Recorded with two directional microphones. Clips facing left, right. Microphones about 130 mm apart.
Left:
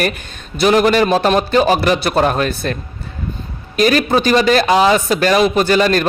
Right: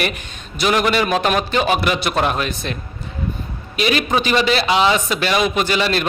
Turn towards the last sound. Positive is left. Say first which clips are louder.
# left 5 dB
turn(degrees=45)  # may be behind; listen again after turning